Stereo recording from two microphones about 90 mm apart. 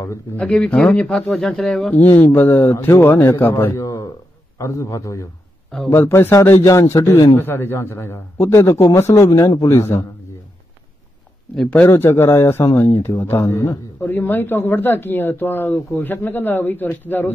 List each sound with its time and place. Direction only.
0.4 s speech: 10° left (ahead or behind)
1.9 s a man's voice: 20° left (ahead or behind)
11.5 s speech: 5° left (ahead or behind)
11.8 s speech: 25° left (ahead or behind)